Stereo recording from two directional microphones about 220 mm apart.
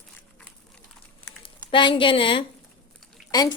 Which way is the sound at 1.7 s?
20° left (ahead or behind).